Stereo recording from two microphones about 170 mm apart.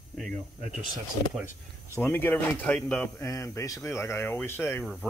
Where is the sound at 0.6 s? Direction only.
50° right (ahead or behind).